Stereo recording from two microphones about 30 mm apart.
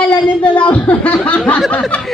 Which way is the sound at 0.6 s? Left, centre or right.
Left.